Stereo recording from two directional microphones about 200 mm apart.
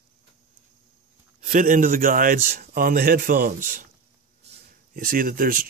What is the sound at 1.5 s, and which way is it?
Speech, 40° right (ahead or behind).